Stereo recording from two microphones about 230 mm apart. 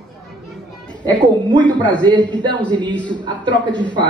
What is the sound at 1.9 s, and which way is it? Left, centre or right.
A woman's voice, centre.